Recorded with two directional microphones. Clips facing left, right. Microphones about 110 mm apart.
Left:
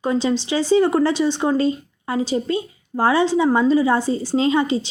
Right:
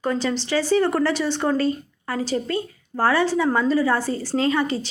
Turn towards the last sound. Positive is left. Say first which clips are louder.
# left 3 dB
turn(degrees=20)  # may be behind; listen again after turning